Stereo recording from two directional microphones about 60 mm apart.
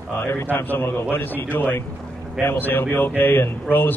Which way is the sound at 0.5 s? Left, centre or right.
Left.